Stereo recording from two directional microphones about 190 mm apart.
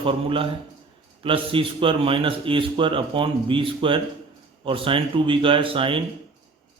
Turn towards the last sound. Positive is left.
turn(degrees=-25)  # may be behind; listen again after turning